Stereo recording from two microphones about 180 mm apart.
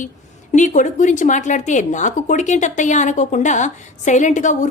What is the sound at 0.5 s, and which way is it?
Speech, 45° left (ahead or behind).